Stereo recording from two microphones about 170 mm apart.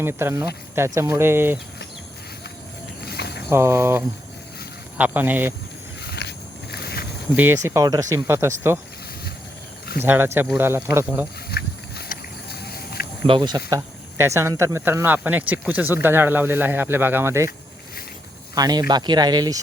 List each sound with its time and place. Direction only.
0.0 s speech: 15° right (ahead or behind)
3.1 s a sound: 70° left (ahead or behind)
3.5 s speech: 15° right (ahead or behind)
6.0 s a sound: 70° left (ahead or behind)
7.3 s speech: 15° right (ahead or behind)
10.0 s speech: 15° right (ahead or behind)
11.5 s a sound: 70° left (ahead or behind)
13.2 s speech: 30° right (ahead or behind)
13.7 s speech: 20° right (ahead or behind)
18.5 s speech: 25° right (ahead or behind)